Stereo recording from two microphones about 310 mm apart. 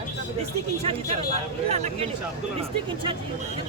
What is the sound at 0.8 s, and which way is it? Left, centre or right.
Speech, centre.